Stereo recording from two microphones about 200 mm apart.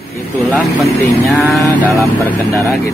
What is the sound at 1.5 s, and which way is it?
Speech, centre (ahead or behind).